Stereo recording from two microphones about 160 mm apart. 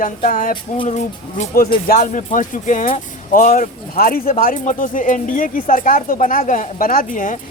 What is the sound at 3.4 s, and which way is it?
Speech, 55° left (ahead or behind).